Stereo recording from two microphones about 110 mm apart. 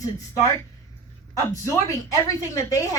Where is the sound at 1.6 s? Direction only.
30° left (ahead or behind).